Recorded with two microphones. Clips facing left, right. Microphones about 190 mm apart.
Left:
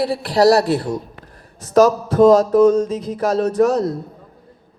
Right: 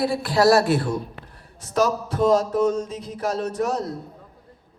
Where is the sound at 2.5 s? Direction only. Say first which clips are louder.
Left 9 dB; 90° left.